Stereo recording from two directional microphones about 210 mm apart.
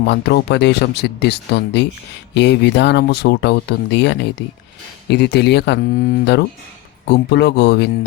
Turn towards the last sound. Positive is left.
turn(degrees=55)  # may be behind; listen again after turning